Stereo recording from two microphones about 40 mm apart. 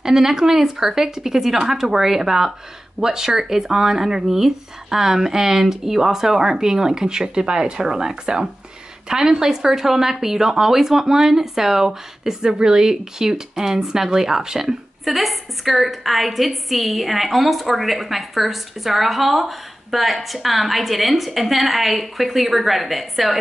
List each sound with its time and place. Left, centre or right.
0.0 s speech: centre
15.1 s a woman's voice: centre